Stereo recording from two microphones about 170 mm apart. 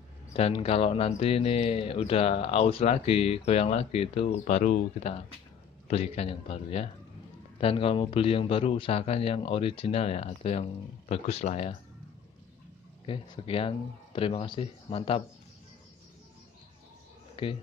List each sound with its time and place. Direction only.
0.3 s speech: 35° left (ahead or behind)
13.0 s speech: 30° left (ahead or behind)
17.4 s speech: 30° left (ahead or behind)